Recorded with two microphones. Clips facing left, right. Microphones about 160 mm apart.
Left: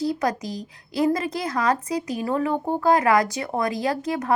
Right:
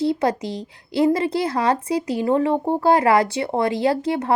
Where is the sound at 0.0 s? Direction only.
30° right (ahead or behind).